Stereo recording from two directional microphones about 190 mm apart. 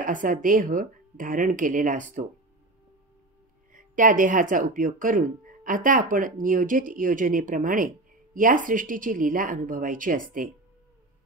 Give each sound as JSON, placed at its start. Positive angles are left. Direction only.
{"t": 0.0, "sound": "speech", "side_deg": -45}
{"t": 3.7, "sound": "speech", "side_deg": -45}